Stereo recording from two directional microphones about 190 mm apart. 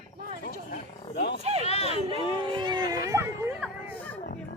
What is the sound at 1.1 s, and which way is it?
Wild animals, 55° left (ahead or behind).